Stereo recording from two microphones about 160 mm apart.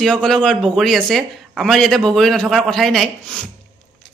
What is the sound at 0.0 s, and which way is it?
A woman's voice, 5° left (ahead or behind).